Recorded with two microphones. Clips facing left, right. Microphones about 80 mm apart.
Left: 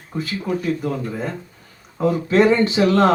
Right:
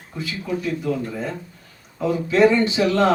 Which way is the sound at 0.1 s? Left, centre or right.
Left.